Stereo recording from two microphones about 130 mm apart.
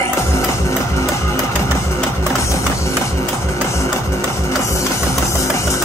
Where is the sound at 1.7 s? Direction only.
20° left (ahead or behind).